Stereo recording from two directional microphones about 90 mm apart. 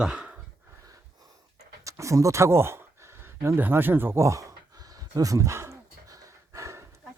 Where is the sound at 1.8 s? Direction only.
35° right (ahead or behind).